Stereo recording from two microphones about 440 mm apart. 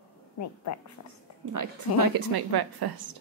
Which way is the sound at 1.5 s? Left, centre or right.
Right.